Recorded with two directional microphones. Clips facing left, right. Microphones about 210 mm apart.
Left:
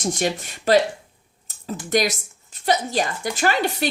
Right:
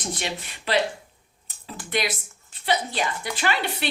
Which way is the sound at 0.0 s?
45° left (ahead or behind).